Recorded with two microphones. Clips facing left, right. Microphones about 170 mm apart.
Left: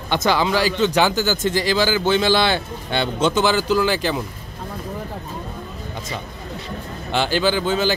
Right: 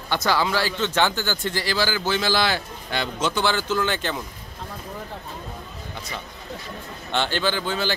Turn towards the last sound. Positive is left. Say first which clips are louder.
# left 6 dB
turn(degrees=15)  # may be behind; listen again after turning